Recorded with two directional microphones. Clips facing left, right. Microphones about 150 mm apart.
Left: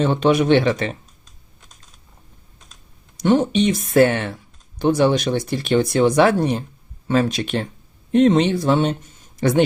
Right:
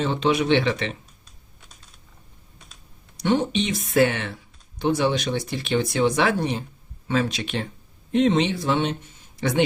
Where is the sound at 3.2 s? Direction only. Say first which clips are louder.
Left 6 dB; 45° left (ahead or behind).